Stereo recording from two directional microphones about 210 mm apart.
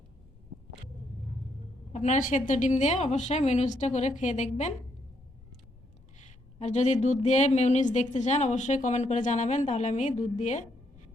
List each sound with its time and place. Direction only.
1.9 s a woman's voice: 35° left (ahead or behind)
6.6 s a woman's voice: 35° left (ahead or behind)